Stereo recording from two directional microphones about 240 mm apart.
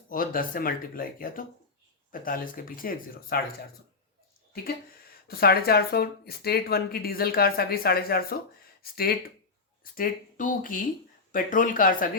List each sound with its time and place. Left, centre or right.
0.1 s speech: left
5.3 s speech: left